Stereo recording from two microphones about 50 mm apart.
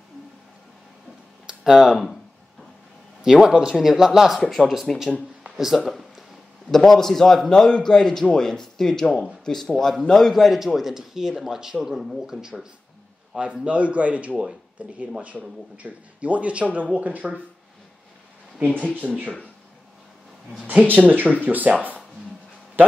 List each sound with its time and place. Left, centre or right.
1.6 s speech: centre
3.2 s speech: centre
4.4 s a man's voice: centre
5.4 s a sound: centre
6.7 s a man's voice: centre; by 17.3 s right
18.9 s speech: right
20.8 s speech: right